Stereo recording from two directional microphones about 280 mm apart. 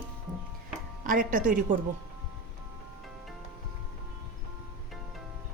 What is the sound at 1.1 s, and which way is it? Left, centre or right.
Speech, right.